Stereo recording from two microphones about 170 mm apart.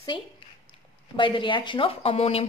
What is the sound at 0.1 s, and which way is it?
A woman's voice, 30° left (ahead or behind).